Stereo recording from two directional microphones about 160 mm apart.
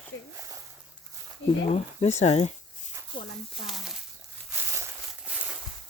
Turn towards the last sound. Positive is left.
turn(degrees=-5)  # may be behind; listen again after turning